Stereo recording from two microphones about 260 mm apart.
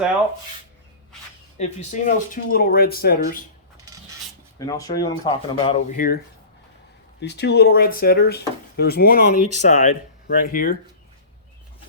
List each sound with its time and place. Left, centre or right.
1.5 s speech: left
4.5 s speech: centre; by 6.1 s left
7.2 s speech: left